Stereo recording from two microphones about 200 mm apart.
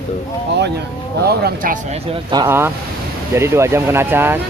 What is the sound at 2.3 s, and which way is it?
Speech, 15° right (ahead or behind).